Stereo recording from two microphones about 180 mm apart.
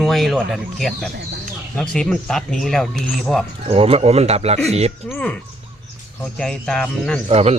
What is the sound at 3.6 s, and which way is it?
Speech, 35° right (ahead or behind).